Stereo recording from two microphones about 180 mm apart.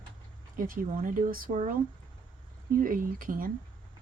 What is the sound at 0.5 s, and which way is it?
Speech, 50° right (ahead or behind).